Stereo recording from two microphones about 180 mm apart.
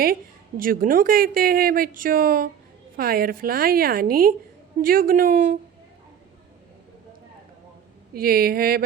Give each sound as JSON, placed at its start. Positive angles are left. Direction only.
{"t": 0.0, "sound": "a woman's voice", "side_deg": -55}
{"t": 8.1, "sound": "a woman's voice", "side_deg": -55}